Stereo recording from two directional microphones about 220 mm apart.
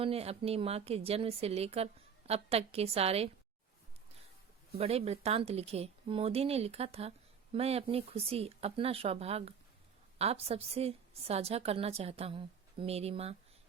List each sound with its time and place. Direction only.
0.0 s a woman's voice: 25° right (ahead or behind)
4.8 s a woman's voice: 25° right (ahead or behind)